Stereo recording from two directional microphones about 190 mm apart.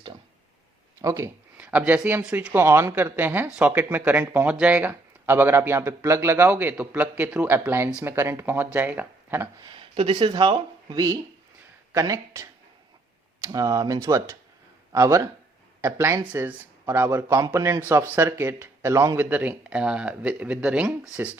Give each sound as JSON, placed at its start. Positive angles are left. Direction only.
{"t": 1.0, "sound": "speech", "side_deg": -15}
{"t": 9.6, "sound": "speech", "side_deg": -30}